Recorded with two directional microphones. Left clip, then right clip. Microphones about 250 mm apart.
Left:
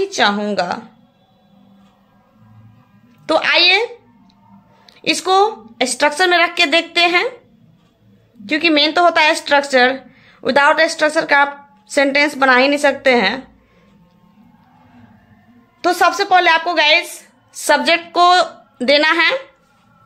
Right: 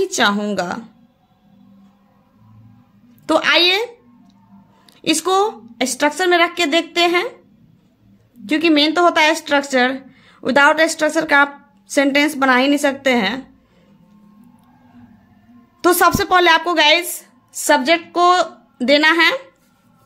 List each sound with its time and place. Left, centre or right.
0.0 s speech: centre
3.3 s speech: centre
8.5 s speech: centre
15.8 s speech: right